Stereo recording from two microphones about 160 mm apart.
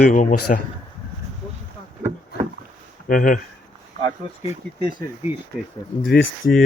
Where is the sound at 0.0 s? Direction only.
55° left (ahead or behind).